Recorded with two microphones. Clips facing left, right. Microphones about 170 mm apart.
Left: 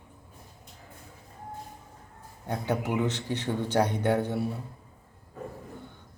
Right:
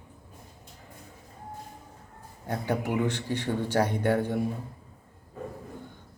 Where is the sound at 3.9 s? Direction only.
10° right (ahead or behind).